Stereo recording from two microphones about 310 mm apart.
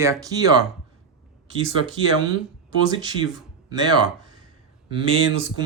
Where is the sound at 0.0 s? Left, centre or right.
Centre.